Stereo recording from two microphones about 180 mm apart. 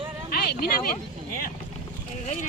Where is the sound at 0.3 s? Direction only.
60° left (ahead or behind).